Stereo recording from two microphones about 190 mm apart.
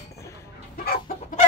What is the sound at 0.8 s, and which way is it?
Chicken, 50° left (ahead or behind).